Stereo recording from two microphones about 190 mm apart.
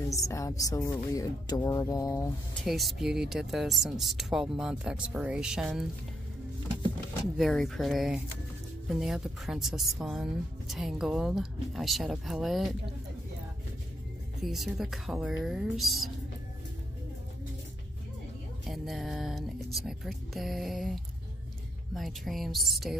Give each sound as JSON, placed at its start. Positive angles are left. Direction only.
{"t": 0.1, "sound": "a woman's voice", "side_deg": 15}
{"t": 2.5, "sound": "speech", "side_deg": 0}
{"t": 7.3, "sound": "speech", "side_deg": 0}
{"t": 14.4, "sound": "speech", "side_deg": 0}
{"t": 18.7, "sound": "speech", "side_deg": 0}